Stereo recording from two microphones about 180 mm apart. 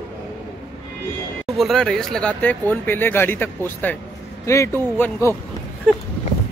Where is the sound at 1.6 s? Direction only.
Centre (ahead or behind).